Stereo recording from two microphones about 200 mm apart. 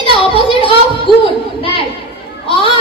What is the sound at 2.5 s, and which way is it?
Speech, 25° left (ahead or behind).